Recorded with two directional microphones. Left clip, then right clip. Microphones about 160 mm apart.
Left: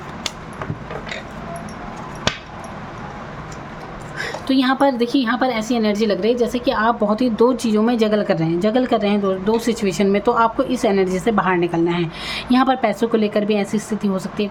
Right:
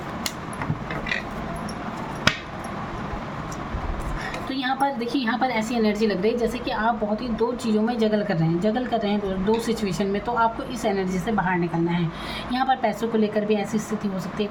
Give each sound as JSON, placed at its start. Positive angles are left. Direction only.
{"t": 4.4, "sound": "a woman's voice", "side_deg": 50}